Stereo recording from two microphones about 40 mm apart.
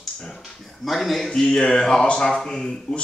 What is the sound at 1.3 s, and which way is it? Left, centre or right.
Speech, centre.